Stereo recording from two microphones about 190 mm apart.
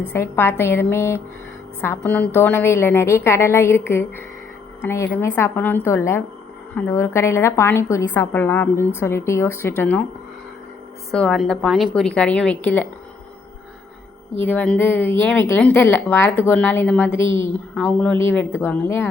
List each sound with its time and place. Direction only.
0.1 s a woman's voice: 10° left (ahead or behind)
11.1 s a woman's voice: centre (ahead or behind)
14.3 s a woman's voice: 10° left (ahead or behind)